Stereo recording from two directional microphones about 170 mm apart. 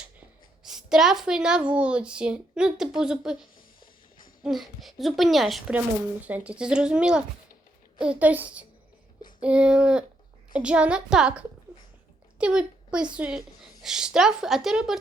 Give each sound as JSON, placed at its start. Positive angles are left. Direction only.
{"t": 0.6, "sound": "speech", "side_deg": -5}
{"t": 4.4, "sound": "a woman's voice", "side_deg": 0}
{"t": 13.4, "sound": "speech", "side_deg": 20}
{"t": 13.8, "sound": "speech", "side_deg": -5}